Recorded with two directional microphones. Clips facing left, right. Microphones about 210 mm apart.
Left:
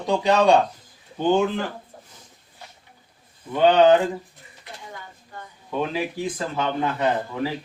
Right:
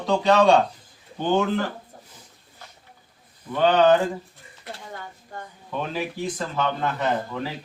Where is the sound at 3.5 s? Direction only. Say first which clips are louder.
Left 2 dB; 15° left (ahead or behind).